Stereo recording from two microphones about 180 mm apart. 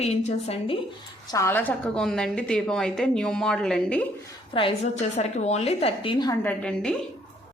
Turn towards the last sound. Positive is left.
turn(degrees=5)  # may be behind; listen again after turning